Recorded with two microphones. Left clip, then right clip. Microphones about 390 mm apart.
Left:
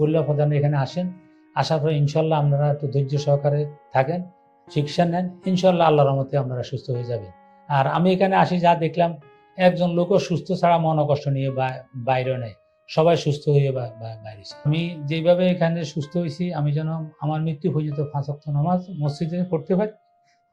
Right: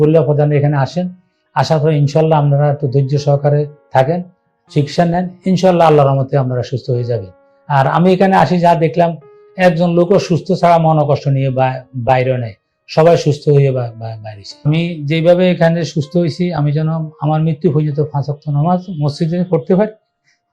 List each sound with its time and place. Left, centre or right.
0.0 s speech: right